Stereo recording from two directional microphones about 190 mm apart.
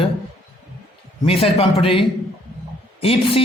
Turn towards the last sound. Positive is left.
turn(degrees=30)  # may be behind; listen again after turning